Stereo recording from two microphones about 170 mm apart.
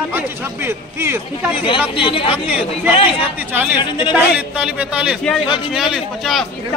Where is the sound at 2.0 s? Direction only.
30° left (ahead or behind).